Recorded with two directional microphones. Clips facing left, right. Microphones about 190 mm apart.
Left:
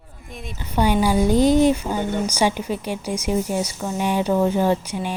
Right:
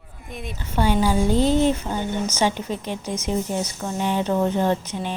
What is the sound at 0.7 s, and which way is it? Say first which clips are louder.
Speech: left 2 dB; 15° left (ahead or behind).